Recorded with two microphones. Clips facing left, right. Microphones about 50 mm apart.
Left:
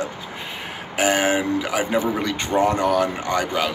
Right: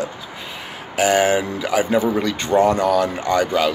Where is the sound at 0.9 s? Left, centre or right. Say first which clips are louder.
Right 3 dB; left.